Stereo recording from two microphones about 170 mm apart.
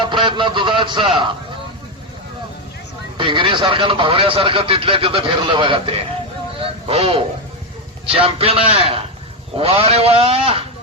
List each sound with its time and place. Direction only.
0.0 s speech: 30° right (ahead or behind)
3.2 s speech: 30° right (ahead or behind)
6.6 s a sound: 35° right (ahead or behind)
8.0 s speech: 35° right (ahead or behind)